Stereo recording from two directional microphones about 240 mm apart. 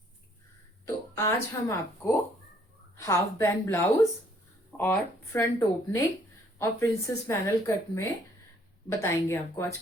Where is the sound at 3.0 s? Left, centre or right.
Centre.